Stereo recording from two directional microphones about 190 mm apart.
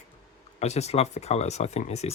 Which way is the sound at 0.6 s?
35° left (ahead or behind).